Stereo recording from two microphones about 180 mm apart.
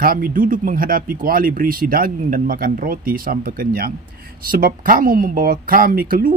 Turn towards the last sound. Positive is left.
turn(degrees=-50)  # may be behind; listen again after turning